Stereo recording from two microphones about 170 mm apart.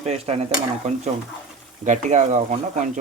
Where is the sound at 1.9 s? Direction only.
45° right (ahead or behind).